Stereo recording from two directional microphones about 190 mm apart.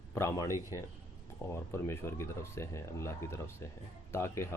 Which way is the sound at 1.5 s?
15° left (ahead or behind).